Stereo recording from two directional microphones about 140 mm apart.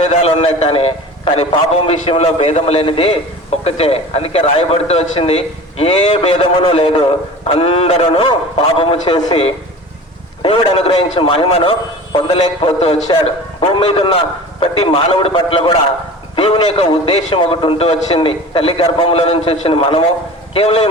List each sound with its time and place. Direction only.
0.0 s a man's voice: 50° left (ahead or behind)